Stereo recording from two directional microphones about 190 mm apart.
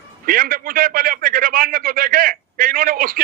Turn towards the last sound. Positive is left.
turn(degrees=-50)  # may be behind; listen again after turning